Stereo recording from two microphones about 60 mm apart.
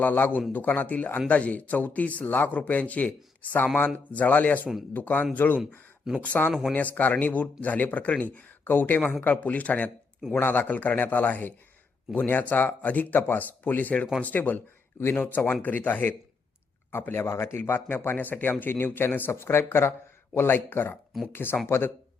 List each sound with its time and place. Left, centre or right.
0.0 s speech: left
6.1 s a man's voice: centre
6.7 s speech: left
16.9 s speech: left